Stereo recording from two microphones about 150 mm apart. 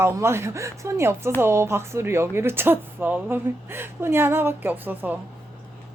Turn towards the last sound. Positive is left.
turn(degrees=-10)  # may be behind; listen again after turning